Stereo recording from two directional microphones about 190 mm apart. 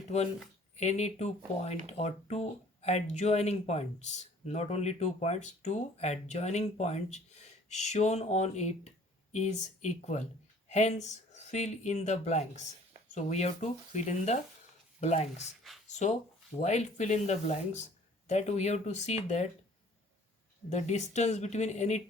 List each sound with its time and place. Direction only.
0.1 s speech: 35° left (ahead or behind)
20.7 s speech: 35° left (ahead or behind)